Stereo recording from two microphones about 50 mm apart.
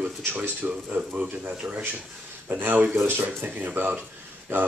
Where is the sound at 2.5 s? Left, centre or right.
Right.